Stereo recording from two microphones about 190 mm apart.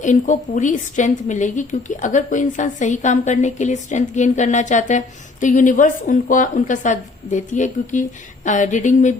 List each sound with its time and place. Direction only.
0.0 s a woman's voice: 40° left (ahead or behind)